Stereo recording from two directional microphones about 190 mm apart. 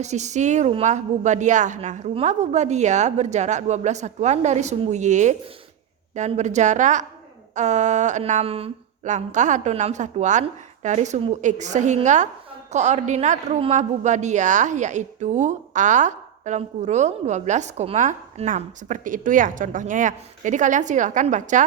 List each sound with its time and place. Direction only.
0.0 s a man's voice: 35° right (ahead or behind)